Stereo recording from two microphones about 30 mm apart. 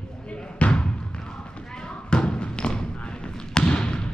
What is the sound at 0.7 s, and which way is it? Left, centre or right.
Basketball bounce, left.